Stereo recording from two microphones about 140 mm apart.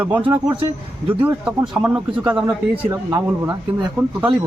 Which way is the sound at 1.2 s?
10° right (ahead or behind).